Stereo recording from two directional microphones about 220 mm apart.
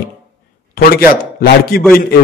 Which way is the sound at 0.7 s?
40° left (ahead or behind).